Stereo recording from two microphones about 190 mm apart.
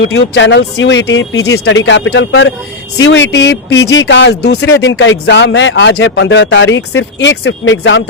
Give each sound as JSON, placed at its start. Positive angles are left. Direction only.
{"t": 0.0, "sound": "speech", "side_deg": 70}